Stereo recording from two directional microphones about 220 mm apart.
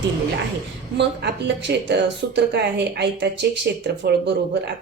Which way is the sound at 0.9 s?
50° right (ahead or behind).